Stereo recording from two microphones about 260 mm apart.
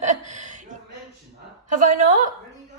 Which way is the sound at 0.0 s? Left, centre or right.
Right.